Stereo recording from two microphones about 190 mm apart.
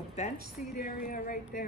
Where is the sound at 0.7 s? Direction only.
50° left (ahead or behind).